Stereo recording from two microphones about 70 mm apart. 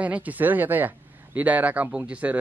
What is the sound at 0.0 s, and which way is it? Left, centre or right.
Speech, right.